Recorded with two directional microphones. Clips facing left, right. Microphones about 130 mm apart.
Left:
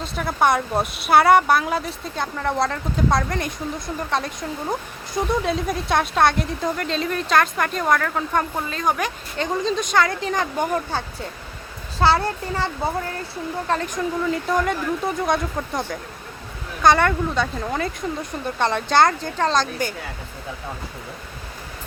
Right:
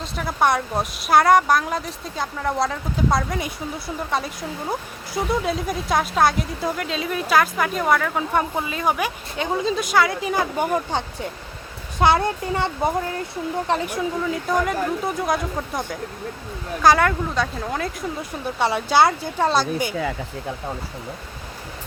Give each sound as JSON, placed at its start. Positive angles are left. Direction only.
{"t": 0.0, "sound": "speech", "side_deg": 0}